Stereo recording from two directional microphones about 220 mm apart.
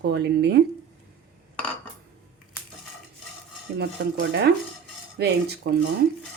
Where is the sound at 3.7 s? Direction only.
50° right (ahead or behind).